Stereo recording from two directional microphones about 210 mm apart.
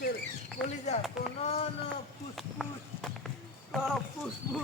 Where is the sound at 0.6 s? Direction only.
30° left (ahead or behind).